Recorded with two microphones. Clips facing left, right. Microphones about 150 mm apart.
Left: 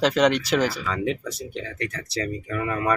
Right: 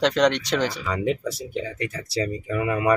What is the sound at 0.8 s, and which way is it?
Speech, 10° right (ahead or behind).